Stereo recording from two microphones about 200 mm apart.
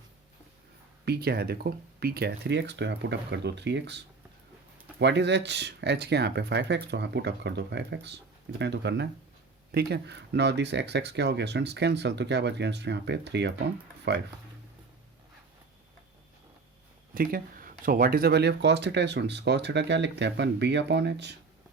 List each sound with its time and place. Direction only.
1.0 s speech: 55° right (ahead or behind)
17.2 s speech: 45° right (ahead or behind)